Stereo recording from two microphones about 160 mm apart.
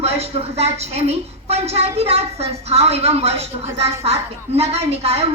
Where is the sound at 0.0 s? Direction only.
40° right (ahead or behind).